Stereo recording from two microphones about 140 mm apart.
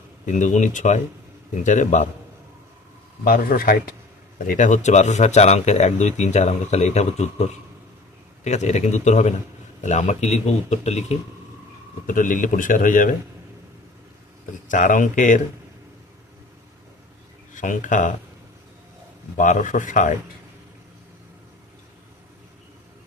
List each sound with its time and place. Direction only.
0.3 s speech: 60° left (ahead or behind)
3.2 s speech: 90° left
4.4 s speech: 65° left (ahead or behind)
8.4 s speech: 55° left (ahead or behind)
12.0 s speech: 70° left (ahead or behind)
14.7 s speech: 70° left (ahead or behind)
17.5 s speech: 65° left (ahead or behind)
19.4 s speech: 65° left (ahead or behind)